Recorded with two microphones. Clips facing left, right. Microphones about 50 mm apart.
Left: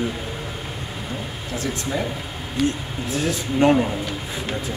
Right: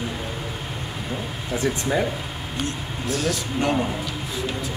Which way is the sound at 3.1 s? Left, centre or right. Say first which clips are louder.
Left 1 dB; left.